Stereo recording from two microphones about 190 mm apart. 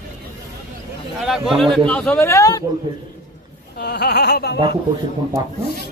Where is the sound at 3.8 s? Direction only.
60° left (ahead or behind).